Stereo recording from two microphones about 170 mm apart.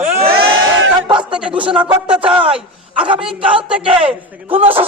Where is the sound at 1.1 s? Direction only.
30° right (ahead or behind).